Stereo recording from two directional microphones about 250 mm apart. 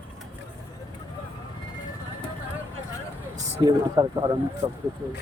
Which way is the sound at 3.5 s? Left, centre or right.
Centre.